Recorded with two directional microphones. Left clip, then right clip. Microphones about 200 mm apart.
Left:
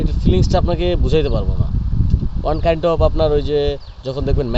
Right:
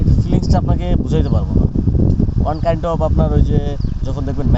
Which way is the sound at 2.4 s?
35° left (ahead or behind).